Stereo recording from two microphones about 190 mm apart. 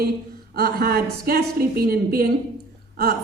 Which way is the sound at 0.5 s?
55° right (ahead or behind).